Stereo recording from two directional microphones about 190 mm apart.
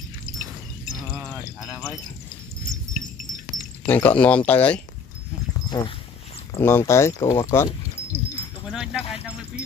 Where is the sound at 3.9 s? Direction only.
10° left (ahead or behind).